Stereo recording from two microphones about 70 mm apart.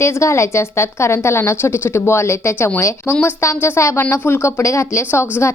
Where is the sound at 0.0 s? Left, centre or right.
Left.